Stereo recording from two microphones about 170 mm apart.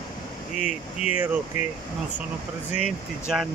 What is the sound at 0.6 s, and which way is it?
Speech, 45° left (ahead or behind).